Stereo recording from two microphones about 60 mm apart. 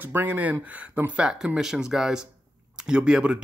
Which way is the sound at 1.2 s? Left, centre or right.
Centre.